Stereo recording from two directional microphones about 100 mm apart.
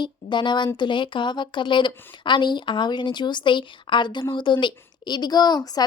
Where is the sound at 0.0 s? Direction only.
50° left (ahead or behind).